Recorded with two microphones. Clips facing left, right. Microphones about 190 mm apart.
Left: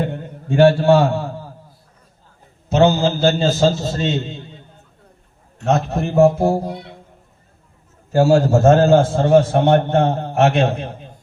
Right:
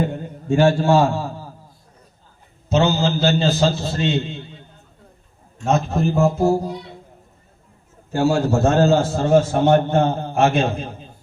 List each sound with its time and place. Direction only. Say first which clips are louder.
0.0 s a sound: right 1 dB; 65° left (ahead or behind)
2.6 s a man's voice: left 3 dB; 55° left (ahead or behind); by 4.4 s 40° left (ahead or behind)
5.5 s a man's voice: left 1 dB; 65° left (ahead or behind)
8.1 s a man's voice: left 4 dB; 45° left (ahead or behind); by 11.1 s 65° left (ahead or behind)